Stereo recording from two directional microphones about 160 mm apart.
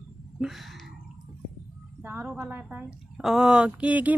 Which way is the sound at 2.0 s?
10° right (ahead or behind).